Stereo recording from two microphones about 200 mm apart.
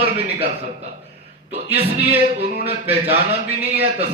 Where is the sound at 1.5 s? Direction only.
30° right (ahead or behind).